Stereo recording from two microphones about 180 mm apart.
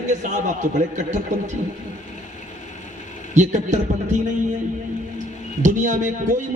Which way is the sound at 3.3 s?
40° right (ahead or behind).